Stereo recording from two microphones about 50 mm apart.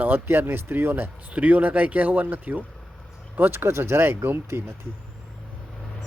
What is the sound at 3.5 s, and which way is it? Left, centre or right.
Speech, right.